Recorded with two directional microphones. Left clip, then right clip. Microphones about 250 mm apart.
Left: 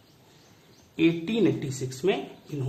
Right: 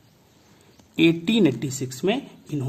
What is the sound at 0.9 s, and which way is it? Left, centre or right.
Speech, right.